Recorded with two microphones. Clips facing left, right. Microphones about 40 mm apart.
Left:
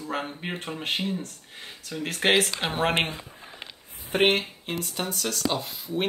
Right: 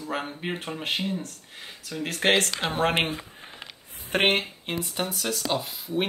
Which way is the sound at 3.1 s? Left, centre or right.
Right.